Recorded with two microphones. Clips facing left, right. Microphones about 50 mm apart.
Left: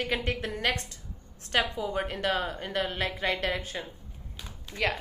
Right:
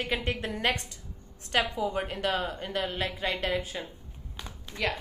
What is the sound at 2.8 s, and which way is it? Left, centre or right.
Speech, left.